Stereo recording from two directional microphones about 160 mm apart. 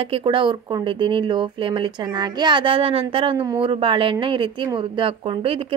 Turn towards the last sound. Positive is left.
turn(degrees=-35)  # may be behind; listen again after turning